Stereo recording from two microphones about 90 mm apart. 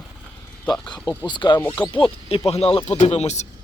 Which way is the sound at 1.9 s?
85° left.